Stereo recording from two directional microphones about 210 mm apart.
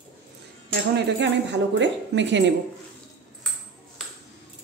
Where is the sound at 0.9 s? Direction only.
55° right (ahead or behind).